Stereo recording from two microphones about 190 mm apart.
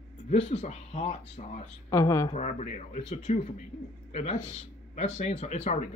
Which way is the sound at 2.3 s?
40° left (ahead or behind).